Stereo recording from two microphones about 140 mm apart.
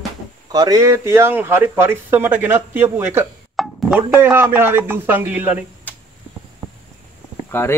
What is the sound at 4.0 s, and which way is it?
Speech, 15° right (ahead or behind).